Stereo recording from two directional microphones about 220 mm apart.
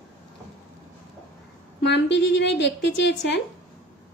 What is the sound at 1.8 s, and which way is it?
A woman's voice, 50° left (ahead or behind).